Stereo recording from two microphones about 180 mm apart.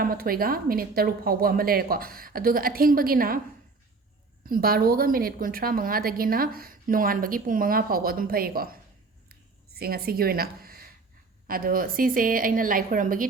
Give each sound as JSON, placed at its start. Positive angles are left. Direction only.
{"t": 0.0, "sound": "a woman's voice", "side_deg": -55}
{"t": 4.4, "sound": "a woman's voice", "side_deg": -55}
{"t": 9.3, "sound": "a sound", "side_deg": -60}
{"t": 11.4, "sound": "a woman's voice", "side_deg": -55}